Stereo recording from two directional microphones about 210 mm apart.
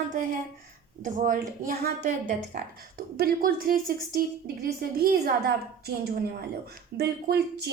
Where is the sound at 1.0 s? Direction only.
40° right (ahead or behind).